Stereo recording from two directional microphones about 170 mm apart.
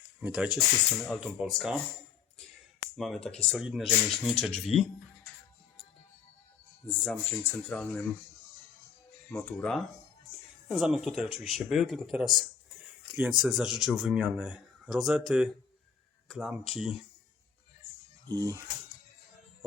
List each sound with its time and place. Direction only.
0.2 s speech: 5° right (ahead or behind)
3.0 s speech: 5° left (ahead or behind)
6.8 s speech: 5° left (ahead or behind)
9.3 s speech: 10° left (ahead or behind)
18.3 s speech: 20° right (ahead or behind)